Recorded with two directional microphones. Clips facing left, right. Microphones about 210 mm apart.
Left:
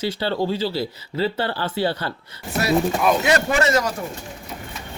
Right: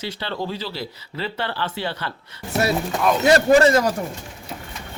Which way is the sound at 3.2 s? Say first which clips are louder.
Right 5 dB; 35° right (ahead or behind).